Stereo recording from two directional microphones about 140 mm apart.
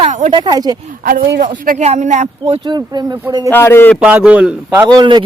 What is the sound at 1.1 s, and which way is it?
Speech, 85° right.